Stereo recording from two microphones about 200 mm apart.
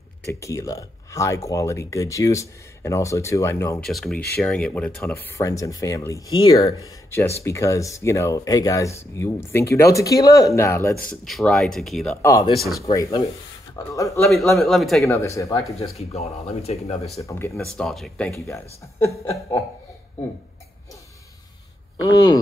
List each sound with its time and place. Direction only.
0.3 s speech: 15° left (ahead or behind)
3.8 s speech: centre (ahead or behind)
11.1 s speech: 5° left (ahead or behind)
12.2 s speech: 15° left (ahead or behind)
12.5 s speech: centre (ahead or behind)
12.9 s speech: 15° left (ahead or behind)
14.2 s speech: centre (ahead or behind)
15.0 s speech: 15° left (ahead or behind)
15.8 s speech: 30° left (ahead or behind)
17.6 s speech: centre (ahead or behind)
18.5 s speech: 15° left (ahead or behind)
22.0 s speech: 20° left (ahead or behind)